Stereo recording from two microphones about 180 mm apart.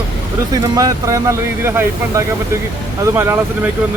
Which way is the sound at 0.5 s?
20° right (ahead or behind).